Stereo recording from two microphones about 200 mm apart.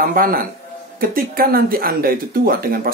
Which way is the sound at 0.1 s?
45° right (ahead or behind).